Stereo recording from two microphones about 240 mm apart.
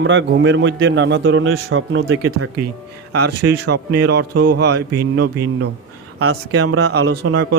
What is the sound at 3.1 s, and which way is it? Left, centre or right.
A man's voice, right.